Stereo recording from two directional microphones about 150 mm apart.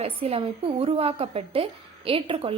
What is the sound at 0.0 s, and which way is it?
A woman's voice, 40° right (ahead or behind).